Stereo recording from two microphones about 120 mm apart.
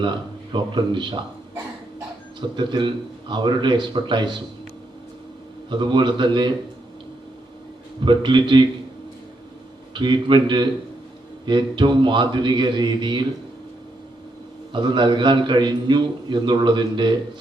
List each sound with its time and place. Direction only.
0.0 s a man's voice: 40° right (ahead or behind)
2.4 s a man's voice: 40° right (ahead or behind)
5.7 s a man's voice: 40° right (ahead or behind)
8.0 s a man's voice: 40° right (ahead or behind)
9.9 s a man's voice: 40° right (ahead or behind)
14.7 s a man's voice: 40° right (ahead or behind)